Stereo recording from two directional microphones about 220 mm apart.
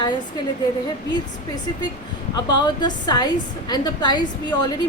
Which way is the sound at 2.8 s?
20° left (ahead or behind).